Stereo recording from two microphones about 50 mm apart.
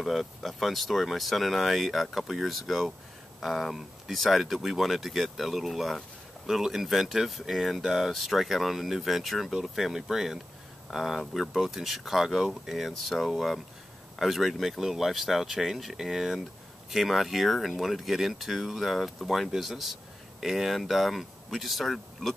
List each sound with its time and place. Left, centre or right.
0.0 s speech: centre